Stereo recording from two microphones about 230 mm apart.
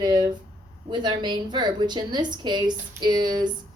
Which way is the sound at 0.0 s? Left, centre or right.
Centre.